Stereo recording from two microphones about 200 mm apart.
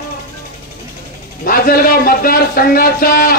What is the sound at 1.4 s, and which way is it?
Speech, 45° left (ahead or behind).